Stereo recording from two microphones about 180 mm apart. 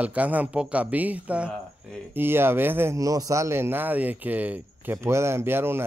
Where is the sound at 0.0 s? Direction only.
10° right (ahead or behind).